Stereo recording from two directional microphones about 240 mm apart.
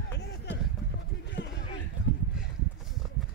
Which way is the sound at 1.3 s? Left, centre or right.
Left.